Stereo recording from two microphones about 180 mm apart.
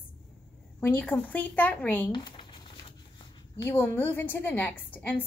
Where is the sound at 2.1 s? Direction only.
25° left (ahead or behind).